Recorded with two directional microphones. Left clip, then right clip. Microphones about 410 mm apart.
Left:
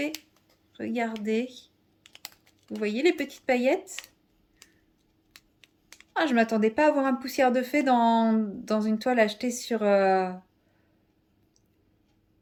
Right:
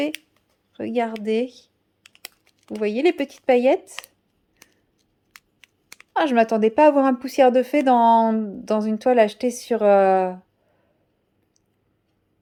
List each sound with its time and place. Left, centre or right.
0.8 s speech: centre
5.5 s speech: centre